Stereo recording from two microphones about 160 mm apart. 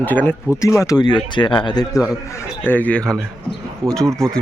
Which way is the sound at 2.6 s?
10° left (ahead or behind).